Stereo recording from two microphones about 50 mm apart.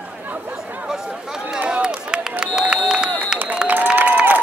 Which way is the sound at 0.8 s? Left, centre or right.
Centre.